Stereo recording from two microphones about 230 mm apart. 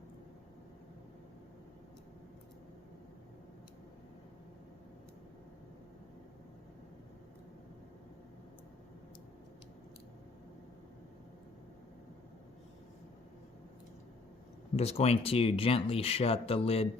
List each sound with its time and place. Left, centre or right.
14.8 s speech: left